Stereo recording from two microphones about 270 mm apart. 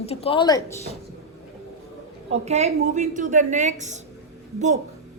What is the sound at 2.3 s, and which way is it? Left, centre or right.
A woman's voice, right.